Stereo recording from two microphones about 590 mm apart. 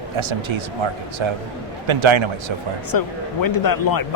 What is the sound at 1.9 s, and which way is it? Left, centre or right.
Speech, right.